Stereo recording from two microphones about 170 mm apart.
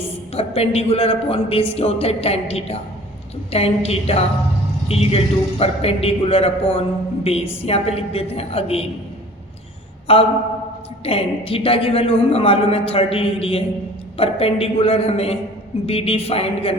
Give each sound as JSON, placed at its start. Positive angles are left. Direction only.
{"t": 0.3, "sound": "a woman's voice", "side_deg": 35}
{"t": 10.1, "sound": "a woman's voice", "side_deg": 35}